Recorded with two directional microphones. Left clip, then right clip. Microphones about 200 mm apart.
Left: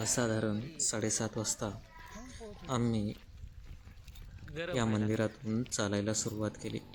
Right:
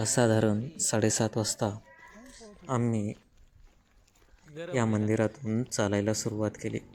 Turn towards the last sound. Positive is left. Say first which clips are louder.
# right 6 dB
turn(degrees=-10)  # may be behind; listen again after turning